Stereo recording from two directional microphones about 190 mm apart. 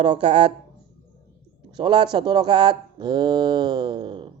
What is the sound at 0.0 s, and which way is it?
Speech, 25° right (ahead or behind).